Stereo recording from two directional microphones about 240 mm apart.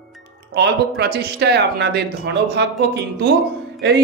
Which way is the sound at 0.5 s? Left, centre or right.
Right.